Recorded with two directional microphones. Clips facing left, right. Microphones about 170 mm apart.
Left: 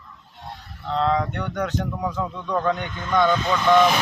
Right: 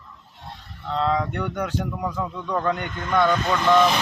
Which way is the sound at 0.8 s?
Centre (ahead or behind).